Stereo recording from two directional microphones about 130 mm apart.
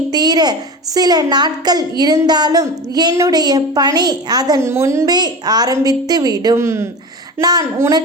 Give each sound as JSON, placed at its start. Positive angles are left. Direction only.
{"t": 0.1, "sound": "a woman's voice", "side_deg": -30}
{"t": 7.4, "sound": "a woman's voice", "side_deg": -30}